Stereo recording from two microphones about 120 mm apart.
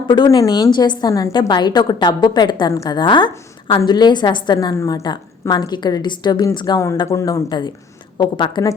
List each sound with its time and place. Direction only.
0.3 s a woman's voice: 35° left (ahead or behind)
5.0 s a woman's voice: 35° left (ahead or behind)
7.1 s speech: 25° left (ahead or behind)
8.2 s a woman's voice: 40° left (ahead or behind)